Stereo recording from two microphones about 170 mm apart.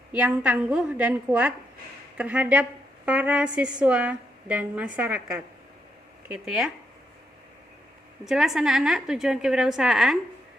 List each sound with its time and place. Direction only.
0.1 s a woman's voice: 5° right (ahead or behind)
8.2 s a woman's voice: centre (ahead or behind)